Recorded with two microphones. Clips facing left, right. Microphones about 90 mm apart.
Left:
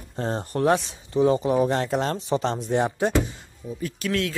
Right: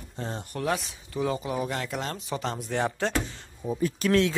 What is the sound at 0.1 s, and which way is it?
Speech, 40° left (ahead or behind).